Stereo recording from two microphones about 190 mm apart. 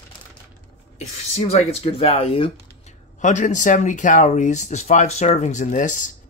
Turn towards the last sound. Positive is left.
turn(degrees=40)  # may be behind; listen again after turning